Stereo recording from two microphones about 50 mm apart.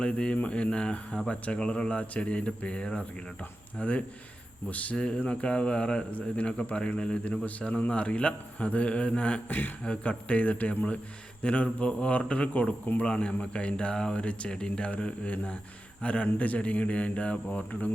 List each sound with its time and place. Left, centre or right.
0.0 s speech: left
3.8 s speech: left
4.9 s speech: centre
9.5 s speech: left
9.8 s speech: left
13.0 s speech: left